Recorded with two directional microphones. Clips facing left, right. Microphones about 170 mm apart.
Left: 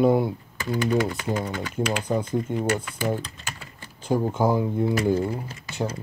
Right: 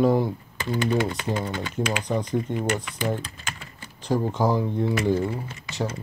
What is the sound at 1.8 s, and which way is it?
Speech, centre (ahead or behind).